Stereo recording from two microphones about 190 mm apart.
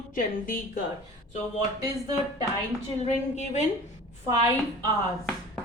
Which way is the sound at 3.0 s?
40° left (ahead or behind).